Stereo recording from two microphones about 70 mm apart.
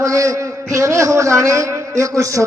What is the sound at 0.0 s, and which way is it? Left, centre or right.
A man's voice, right.